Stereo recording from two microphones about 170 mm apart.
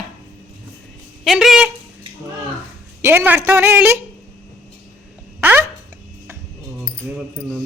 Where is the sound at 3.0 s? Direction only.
15° right (ahead or behind).